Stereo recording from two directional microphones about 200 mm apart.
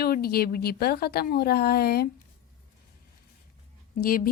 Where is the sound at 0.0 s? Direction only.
50° left (ahead or behind).